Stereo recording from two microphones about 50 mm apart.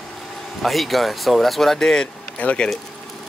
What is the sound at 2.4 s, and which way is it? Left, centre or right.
Speech, left.